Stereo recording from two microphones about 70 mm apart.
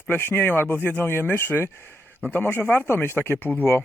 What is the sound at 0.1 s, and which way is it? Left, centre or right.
Speech, left.